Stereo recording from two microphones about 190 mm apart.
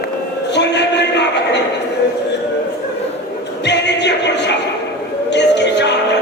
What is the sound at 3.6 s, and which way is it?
Music, 65° left (ahead or behind).